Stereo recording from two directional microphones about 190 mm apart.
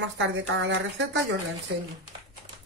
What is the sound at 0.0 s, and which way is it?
Speech, 75° right (ahead or behind).